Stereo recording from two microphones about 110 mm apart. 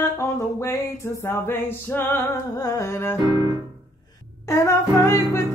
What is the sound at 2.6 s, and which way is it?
Music, 25° left (ahead or behind).